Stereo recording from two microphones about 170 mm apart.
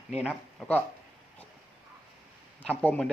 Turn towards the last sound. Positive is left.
turn(degrees=10)  # may be behind; listen again after turning